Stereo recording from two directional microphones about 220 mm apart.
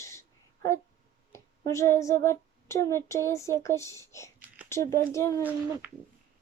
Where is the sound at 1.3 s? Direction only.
15° left (ahead or behind).